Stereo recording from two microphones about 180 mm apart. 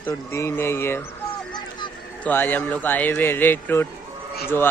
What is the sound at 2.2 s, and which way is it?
A man's voice, 10° left (ahead or behind).